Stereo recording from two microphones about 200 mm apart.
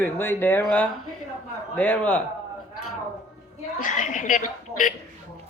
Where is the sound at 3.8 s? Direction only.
40° left (ahead or behind).